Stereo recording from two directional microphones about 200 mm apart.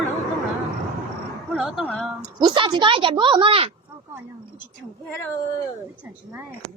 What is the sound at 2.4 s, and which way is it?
Speech, 25° right (ahead or behind).